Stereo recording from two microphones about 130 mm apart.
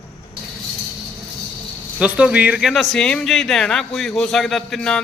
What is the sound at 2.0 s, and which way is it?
Speech, 10° right (ahead or behind).